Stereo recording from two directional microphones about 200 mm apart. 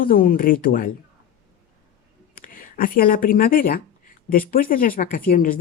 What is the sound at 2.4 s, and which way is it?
A woman's voice, 45° left (ahead or behind).